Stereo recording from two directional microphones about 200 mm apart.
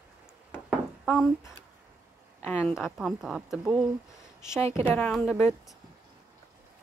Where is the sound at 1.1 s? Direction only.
Centre (ahead or behind).